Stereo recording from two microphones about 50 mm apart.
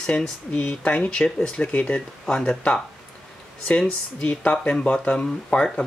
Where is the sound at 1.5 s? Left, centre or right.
Left.